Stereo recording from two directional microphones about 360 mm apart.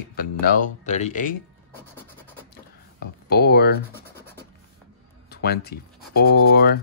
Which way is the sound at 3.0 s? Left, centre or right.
Left.